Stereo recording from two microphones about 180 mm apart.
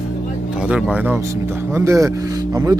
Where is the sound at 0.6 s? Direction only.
5° right (ahead or behind).